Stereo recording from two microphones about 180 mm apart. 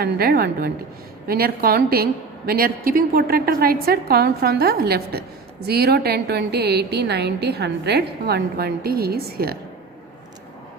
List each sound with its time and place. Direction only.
0.0 s a woman's voice: 60° right (ahead or behind)